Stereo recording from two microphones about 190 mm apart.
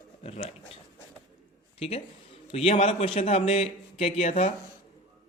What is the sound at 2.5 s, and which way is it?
Speech, 35° left (ahead or behind).